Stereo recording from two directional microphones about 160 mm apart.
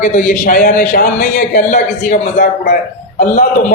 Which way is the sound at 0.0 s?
60° left (ahead or behind).